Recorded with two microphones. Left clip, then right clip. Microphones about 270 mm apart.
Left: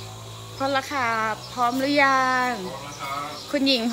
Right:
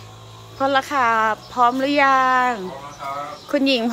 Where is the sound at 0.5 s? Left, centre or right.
Centre.